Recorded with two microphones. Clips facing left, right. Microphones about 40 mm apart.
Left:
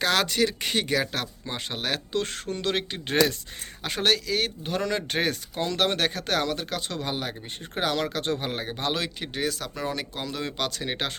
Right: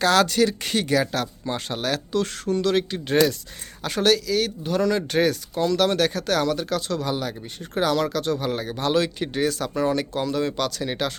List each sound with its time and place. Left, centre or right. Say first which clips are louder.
0.0 s speech: right 5 dB; centre
10.7 s speech: right 4 dB; left